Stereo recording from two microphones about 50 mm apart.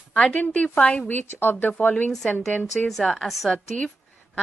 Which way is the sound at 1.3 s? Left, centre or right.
Left.